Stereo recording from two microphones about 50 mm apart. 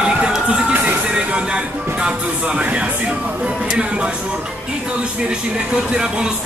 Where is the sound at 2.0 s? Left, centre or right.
Right.